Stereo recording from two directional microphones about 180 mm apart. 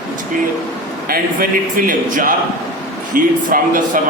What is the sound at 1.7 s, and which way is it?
Speech, 50° right (ahead or behind).